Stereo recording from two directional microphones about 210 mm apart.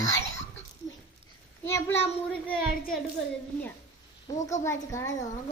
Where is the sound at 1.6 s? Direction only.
10° left (ahead or behind).